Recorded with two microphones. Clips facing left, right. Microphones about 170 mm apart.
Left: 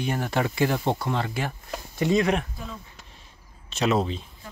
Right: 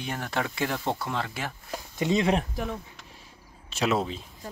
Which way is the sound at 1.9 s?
20° right (ahead or behind).